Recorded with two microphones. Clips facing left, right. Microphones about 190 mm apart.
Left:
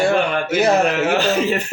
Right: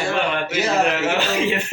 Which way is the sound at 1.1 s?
40° left (ahead or behind).